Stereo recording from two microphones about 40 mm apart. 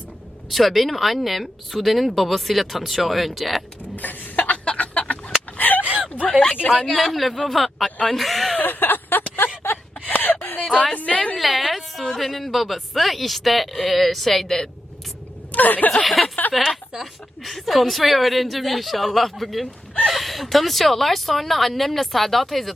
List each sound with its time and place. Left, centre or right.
0.5 s speech: centre
3.9 s cough: left
4.5 s chicken: left
5.5 s a sound: left
5.8 s whimper: right
6.8 s speech: centre
8.6 s a sound: left
10.9 s a woman's voice: left
11.3 s speech: centre
15.5 s speech: left
16.0 s speech: centre